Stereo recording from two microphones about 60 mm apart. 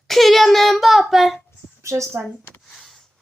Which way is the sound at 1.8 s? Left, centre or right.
Right.